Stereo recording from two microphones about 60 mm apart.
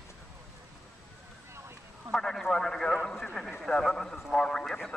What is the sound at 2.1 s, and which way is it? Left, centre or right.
A man's voice, centre.